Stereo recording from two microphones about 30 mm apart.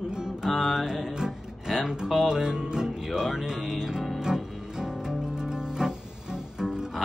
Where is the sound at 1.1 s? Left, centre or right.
Centre.